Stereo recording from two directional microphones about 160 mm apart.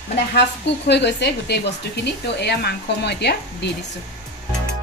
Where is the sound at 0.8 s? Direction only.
90° left.